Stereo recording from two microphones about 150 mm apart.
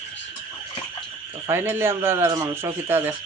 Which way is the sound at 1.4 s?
15° right (ahead or behind).